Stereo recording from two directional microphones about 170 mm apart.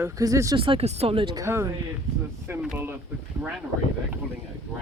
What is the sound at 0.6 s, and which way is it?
Speech, 35° right (ahead or behind).